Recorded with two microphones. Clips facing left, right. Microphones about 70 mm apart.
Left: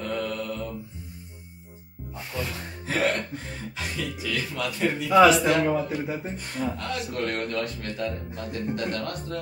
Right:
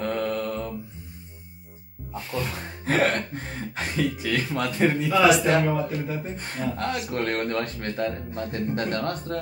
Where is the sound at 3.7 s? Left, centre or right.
Right.